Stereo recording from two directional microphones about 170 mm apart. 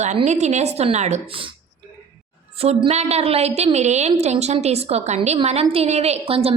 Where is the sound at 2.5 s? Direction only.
35° right (ahead or behind).